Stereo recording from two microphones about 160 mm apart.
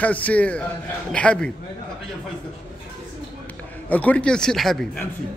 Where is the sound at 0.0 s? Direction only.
10° left (ahead or behind).